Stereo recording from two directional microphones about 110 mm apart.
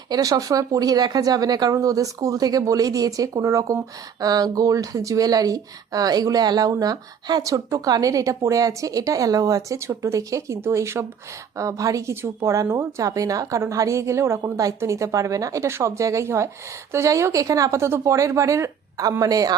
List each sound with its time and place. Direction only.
0.1 s speech: 35° right (ahead or behind)